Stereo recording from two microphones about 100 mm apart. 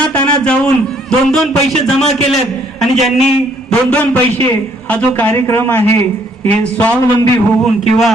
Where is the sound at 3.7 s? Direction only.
10° left (ahead or behind).